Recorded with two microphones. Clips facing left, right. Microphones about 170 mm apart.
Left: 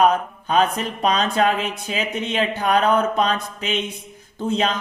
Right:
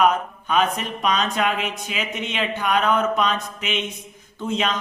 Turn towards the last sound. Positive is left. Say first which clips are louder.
# left 3 dB
turn(degrees=35)  # may be behind; listen again after turning